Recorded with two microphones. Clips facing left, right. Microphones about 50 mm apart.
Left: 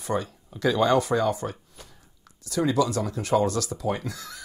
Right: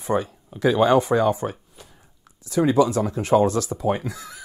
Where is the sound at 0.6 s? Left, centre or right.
Centre.